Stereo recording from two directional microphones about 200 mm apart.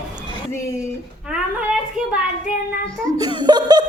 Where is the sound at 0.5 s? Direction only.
15° left (ahead or behind).